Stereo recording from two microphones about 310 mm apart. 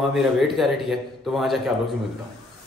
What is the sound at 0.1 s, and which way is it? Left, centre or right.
Speech, centre.